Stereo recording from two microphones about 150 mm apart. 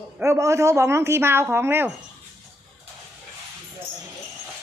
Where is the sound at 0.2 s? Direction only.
20° right (ahead or behind).